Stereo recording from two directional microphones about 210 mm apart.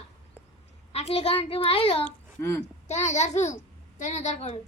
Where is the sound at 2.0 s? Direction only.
10° left (ahead or behind).